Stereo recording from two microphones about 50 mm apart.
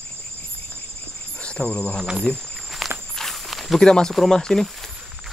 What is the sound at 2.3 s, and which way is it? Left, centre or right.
Speech, left.